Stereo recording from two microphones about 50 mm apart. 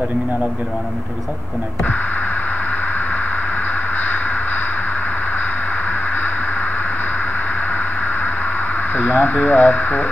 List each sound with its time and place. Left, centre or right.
8.9 s speech: left